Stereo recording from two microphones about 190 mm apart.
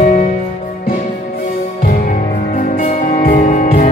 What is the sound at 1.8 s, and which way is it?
Music, 45° left (ahead or behind).